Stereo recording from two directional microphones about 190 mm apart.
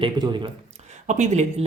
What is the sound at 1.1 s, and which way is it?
Speech, 35° right (ahead or behind).